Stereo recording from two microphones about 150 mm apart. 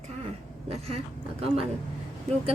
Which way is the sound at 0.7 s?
45° right (ahead or behind).